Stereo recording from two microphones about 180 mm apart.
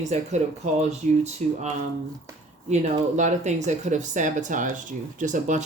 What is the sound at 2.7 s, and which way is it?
Speech, 40° right (ahead or behind).